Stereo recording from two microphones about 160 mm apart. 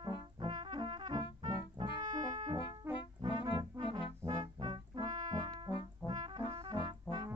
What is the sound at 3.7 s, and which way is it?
Music, 30° right (ahead or behind).